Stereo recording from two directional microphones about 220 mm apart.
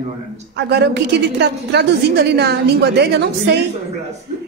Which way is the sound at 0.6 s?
50° right (ahead or behind).